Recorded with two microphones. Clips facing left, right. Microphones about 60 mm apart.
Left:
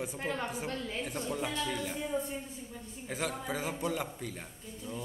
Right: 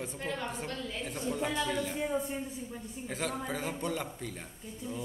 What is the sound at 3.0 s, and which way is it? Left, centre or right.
A man's voice, centre.